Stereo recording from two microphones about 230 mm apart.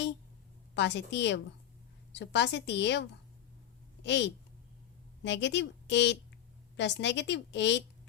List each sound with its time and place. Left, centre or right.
0.7 s a woman's voice: left